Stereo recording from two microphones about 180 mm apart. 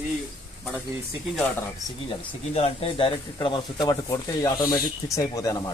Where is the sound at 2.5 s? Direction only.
35° left (ahead or behind).